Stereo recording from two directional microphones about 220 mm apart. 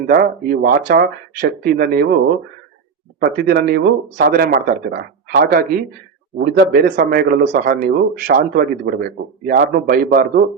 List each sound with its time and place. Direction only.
0.1 s speech: 40° right (ahead or behind)
3.2 s speech: 45° right (ahead or behind)